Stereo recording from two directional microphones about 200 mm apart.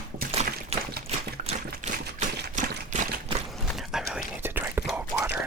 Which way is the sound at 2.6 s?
40° right (ahead or behind).